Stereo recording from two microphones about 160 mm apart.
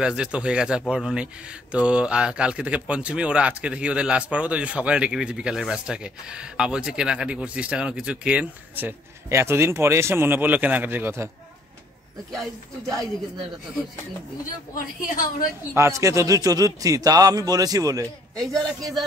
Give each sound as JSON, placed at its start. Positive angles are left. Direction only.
{"t": 0.0, "sound": "speech", "side_deg": -5}
{"t": 12.3, "sound": "speech", "side_deg": 0}
{"t": 15.0, "sound": "a woman's voice", "side_deg": 60}
{"t": 15.7, "sound": "a man's voice", "side_deg": -20}